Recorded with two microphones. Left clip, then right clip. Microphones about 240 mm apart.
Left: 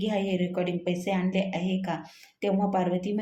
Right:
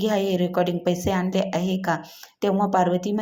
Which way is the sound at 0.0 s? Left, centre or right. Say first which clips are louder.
Right 6 dB; right.